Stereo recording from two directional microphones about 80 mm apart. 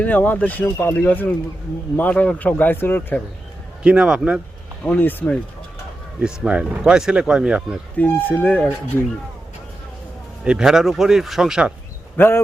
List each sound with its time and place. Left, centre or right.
0.0 s speech: left
3.8 s speech: centre
4.9 s speech: left
6.2 s speech: centre
7.9 s speech: left
10.4 s speech: centre
12.1 s speech: left